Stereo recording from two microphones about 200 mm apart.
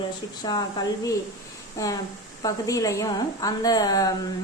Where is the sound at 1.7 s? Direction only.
15° left (ahead or behind).